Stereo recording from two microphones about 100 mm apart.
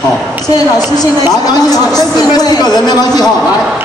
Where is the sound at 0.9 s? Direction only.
40° left (ahead or behind).